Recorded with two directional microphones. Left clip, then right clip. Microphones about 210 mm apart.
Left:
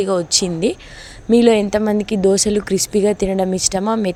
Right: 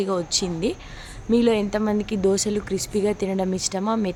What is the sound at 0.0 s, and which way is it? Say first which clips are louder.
Speech: left 7 dB; 30° left (ahead or behind).